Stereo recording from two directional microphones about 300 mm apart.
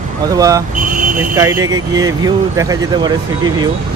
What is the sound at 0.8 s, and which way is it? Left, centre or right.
Vehicle, right.